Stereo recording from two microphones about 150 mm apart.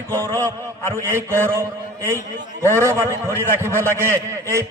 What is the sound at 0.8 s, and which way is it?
Speech, 15° left (ahead or behind).